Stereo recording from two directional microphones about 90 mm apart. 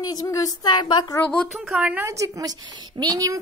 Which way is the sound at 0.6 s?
55° left (ahead or behind).